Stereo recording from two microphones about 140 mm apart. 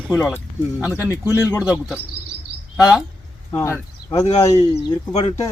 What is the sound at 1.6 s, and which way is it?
Speech, 5° right (ahead or behind).